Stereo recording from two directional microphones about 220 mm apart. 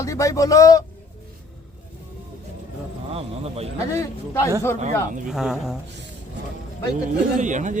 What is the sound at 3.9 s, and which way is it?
Speech, 15° left (ahead or behind).